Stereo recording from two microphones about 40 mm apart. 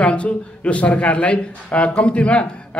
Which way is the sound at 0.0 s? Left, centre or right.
Left.